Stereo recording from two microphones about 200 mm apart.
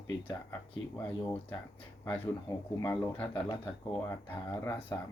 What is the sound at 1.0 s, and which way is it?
Speech, 10° left (ahead or behind).